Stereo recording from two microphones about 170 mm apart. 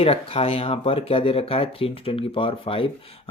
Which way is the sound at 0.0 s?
35° left (ahead or behind).